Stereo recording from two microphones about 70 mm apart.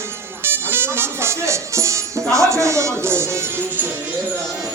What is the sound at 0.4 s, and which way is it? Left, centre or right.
Music, right.